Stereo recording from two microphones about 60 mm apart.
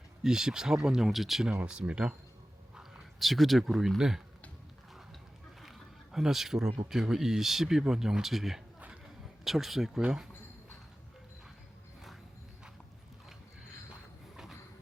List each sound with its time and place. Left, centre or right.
0.2 s speech: centre
1.6 s speech: centre
3.2 s speech: centre
5.6 s a sound: centre
6.9 s speech: centre